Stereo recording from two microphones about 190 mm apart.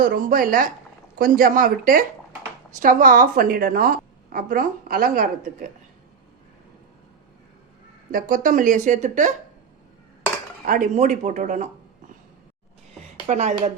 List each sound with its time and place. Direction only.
0.0 s a woman's voice: 45° right (ahead or behind)
8.1 s speech: 45° right (ahead or behind)
10.7 s speech: 45° right (ahead or behind)
13.2 s speech: 35° right (ahead or behind)